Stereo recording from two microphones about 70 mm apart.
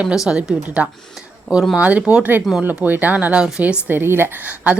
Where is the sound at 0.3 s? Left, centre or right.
Centre; by 4.3 s right.